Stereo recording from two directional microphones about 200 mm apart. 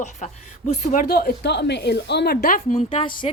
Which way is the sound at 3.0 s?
25° left (ahead or behind).